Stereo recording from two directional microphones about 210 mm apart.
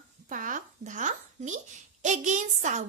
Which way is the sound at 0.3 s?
40° right (ahead or behind).